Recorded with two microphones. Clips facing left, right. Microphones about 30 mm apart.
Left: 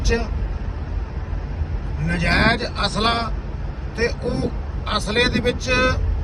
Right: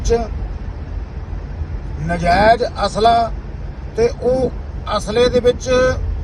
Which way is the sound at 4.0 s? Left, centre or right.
Left.